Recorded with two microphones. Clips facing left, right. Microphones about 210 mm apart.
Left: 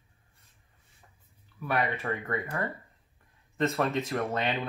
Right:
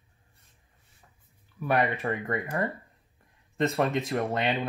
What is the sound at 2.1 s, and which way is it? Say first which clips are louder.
Speech: right 3 dB; 25° right (ahead or behind).